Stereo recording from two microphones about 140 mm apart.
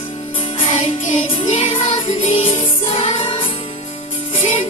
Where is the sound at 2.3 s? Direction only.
40° left (ahead or behind).